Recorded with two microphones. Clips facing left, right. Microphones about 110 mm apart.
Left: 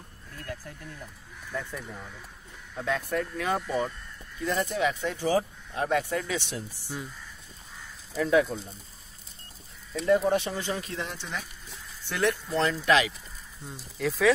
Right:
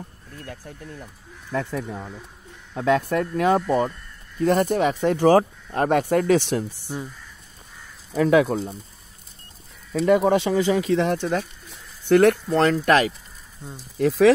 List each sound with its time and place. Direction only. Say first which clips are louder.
1.5 s speech: right 9 dB; 65° right (ahead or behind); by 5.2 s 50° right (ahead or behind)
5.2 s speech: right 10 dB; 60° right (ahead or behind)
8.1 s speech: right 6 dB; 80° right
10.0 s speech: right 5 dB; 90° right
11.1 s speech: right 12 dB; 50° right (ahead or behind)